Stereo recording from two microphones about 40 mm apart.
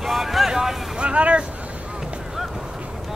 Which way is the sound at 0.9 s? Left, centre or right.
Right.